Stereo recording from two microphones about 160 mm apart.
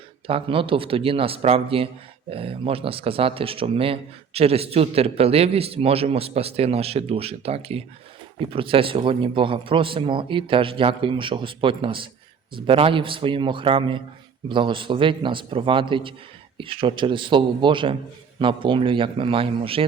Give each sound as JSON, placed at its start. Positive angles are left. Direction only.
{"t": 0.3, "sound": "speech", "side_deg": -35}